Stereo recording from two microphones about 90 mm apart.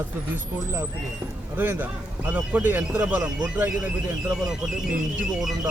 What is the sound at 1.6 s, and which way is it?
A man's voice, 20° right (ahead or behind).